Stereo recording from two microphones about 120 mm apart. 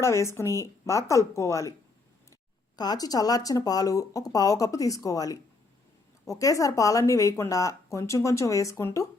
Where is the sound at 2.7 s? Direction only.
35° left (ahead or behind).